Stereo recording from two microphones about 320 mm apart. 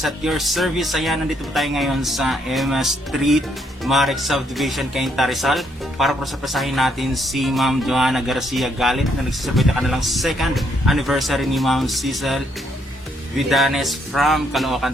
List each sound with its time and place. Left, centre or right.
0.0 s speech: centre
13.5 s speech: centre